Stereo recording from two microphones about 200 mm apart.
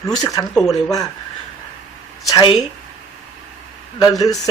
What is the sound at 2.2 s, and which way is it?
Speech, 25° left (ahead or behind).